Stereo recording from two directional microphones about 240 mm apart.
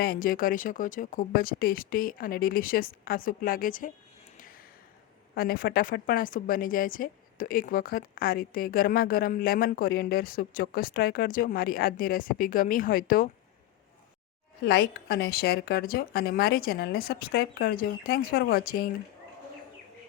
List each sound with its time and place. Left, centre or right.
0.0 s a woman's voice: left
4.4 s a sound: left
5.3 s a woman's voice: left
14.6 s a woman's voice: left